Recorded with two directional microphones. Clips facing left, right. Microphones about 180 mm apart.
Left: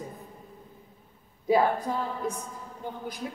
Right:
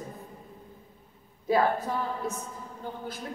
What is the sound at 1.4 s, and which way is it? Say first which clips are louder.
Speech: left 1 dB; 15° left (ahead or behind).